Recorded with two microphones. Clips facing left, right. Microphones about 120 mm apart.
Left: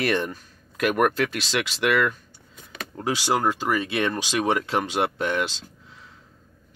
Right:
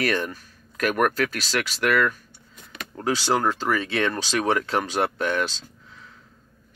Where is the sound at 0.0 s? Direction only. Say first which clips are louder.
Left 1 dB; 20° left (ahead or behind).